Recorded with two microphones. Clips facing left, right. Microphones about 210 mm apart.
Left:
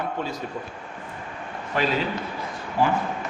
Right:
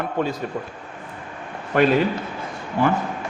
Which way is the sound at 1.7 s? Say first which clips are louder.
Right 8 dB; 55° right (ahead or behind).